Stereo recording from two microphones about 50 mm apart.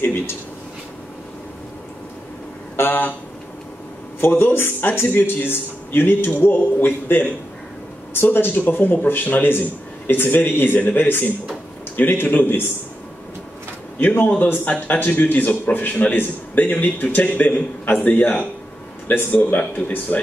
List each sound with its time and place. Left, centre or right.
0.0 s speech: left
2.7 s speech: left
4.3 s a man's voice: left
13.9 s a man's voice: left